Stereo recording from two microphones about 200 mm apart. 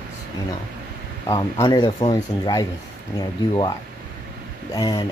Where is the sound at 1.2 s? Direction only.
20° left (ahead or behind).